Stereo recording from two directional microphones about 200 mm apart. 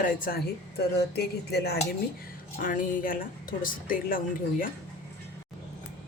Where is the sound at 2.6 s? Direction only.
45° left (ahead or behind).